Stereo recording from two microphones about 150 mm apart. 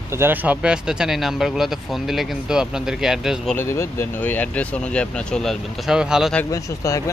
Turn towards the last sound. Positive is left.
turn(degrees=20)  # may be behind; listen again after turning